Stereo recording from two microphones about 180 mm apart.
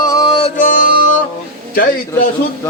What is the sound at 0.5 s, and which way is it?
Music, 50° left (ahead or behind).